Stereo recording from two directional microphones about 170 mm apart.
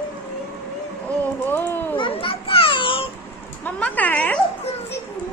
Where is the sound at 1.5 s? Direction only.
10° left (ahead or behind).